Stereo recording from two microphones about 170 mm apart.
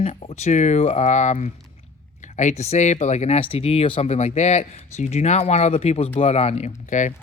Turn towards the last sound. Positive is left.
turn(degrees=45)  # may be behind; listen again after turning